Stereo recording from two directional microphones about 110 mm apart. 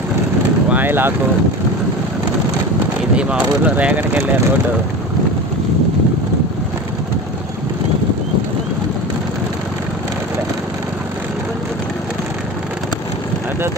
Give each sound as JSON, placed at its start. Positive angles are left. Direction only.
{"t": 0.7, "sound": "vehicle", "side_deg": -15}
{"t": 3.2, "sound": "speech", "side_deg": -10}